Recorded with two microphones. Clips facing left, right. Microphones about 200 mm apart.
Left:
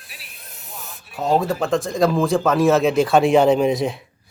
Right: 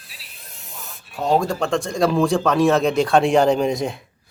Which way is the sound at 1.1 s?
Centre (ahead or behind).